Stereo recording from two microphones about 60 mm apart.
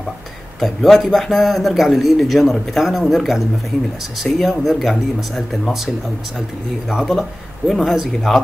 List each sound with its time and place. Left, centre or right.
0.6 s a man's voice: centre
6.9 s a man's voice: centre